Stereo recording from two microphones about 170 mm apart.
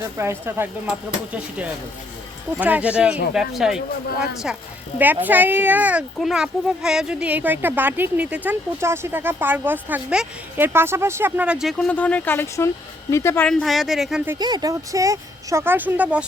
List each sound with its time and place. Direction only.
0.0 s speech: 15° right (ahead or behind)
4.9 s speech: 10° right (ahead or behind); by 13.5 s 15° left (ahead or behind)
13.5 s speech: centre (ahead or behind)
14.3 s speech: 25° right (ahead or behind); by 16.2 s 10° right (ahead or behind)